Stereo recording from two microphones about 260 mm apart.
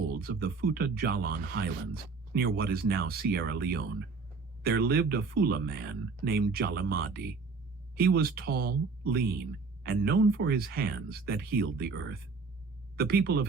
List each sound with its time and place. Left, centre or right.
0.2 s speech: right